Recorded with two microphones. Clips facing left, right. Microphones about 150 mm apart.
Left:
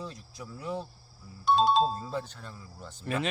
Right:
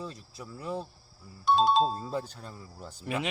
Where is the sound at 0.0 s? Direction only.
5° right (ahead or behind).